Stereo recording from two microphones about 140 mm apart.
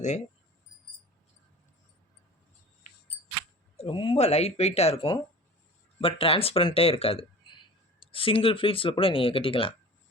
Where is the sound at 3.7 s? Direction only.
40° left (ahead or behind).